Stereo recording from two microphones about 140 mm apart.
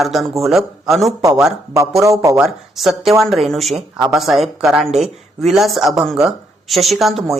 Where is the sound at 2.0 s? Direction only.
25° right (ahead or behind).